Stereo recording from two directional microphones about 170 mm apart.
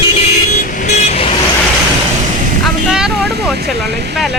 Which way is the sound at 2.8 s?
5° right (ahead or behind).